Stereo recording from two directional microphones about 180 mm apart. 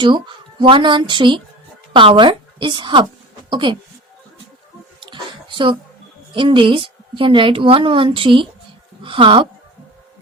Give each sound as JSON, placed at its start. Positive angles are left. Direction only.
{"t": 0.0, "sound": "a woman's voice", "side_deg": -25}
{"t": 4.9, "sound": "a sound", "side_deg": -25}
{"t": 6.3, "sound": "a woman's voice", "side_deg": -30}